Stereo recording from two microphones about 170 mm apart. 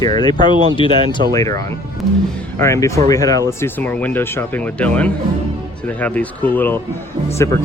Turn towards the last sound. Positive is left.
turn(degrees=20)  # may be behind; listen again after turning